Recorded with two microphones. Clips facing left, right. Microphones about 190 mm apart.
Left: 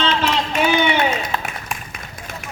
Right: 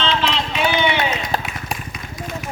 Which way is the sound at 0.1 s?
50° left (ahead or behind).